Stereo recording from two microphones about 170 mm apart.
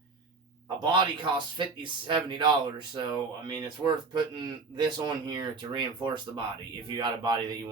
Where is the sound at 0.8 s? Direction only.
25° right (ahead or behind).